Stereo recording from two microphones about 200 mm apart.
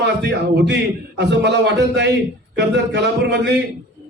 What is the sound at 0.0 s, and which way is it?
A man's voice, 55° right (ahead or behind).